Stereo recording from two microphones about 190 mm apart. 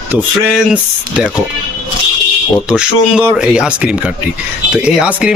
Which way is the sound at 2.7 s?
5° right (ahead or behind).